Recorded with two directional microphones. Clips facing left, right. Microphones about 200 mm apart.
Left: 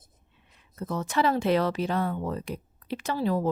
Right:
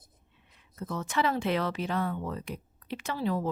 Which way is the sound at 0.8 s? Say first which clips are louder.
Left 3 dB; 35° left (ahead or behind).